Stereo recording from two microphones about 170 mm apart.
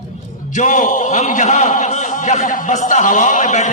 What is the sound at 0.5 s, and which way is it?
A man's voice, 45° left (ahead or behind).